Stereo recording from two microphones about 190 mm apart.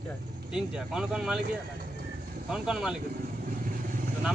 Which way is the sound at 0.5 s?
5° right (ahead or behind).